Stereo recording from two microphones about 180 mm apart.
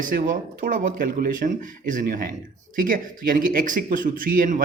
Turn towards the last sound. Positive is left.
turn(degrees=-50)  # may be behind; listen again after turning